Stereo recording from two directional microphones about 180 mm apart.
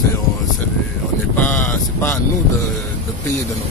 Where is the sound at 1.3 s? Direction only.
10° left (ahead or behind).